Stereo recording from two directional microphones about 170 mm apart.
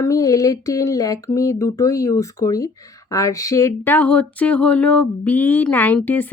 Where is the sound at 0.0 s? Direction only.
20° left (ahead or behind).